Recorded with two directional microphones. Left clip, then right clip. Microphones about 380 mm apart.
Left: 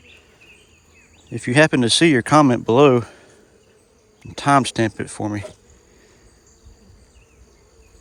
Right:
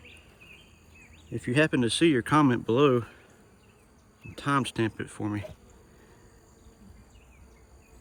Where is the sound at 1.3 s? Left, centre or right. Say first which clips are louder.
Left 10 dB; centre.